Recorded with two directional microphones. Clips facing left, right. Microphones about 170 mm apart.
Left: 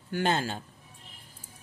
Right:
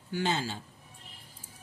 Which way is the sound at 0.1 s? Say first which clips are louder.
Left 3 dB; 55° left (ahead or behind).